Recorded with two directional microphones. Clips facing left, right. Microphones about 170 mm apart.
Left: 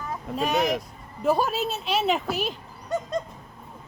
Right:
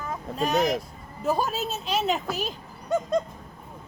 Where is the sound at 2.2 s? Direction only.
40° right (ahead or behind).